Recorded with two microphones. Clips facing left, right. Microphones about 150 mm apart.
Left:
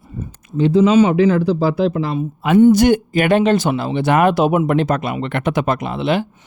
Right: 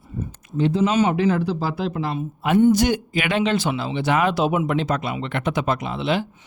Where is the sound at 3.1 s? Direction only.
45° left (ahead or behind).